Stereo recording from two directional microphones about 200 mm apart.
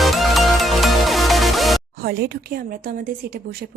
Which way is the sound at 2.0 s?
50° right (ahead or behind).